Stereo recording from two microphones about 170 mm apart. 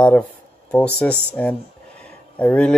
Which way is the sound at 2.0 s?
10° left (ahead or behind).